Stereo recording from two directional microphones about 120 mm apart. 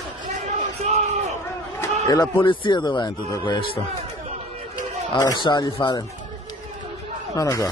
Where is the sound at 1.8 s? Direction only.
30° left (ahead or behind).